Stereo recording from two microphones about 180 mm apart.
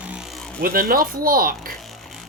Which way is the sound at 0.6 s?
55° right (ahead or behind).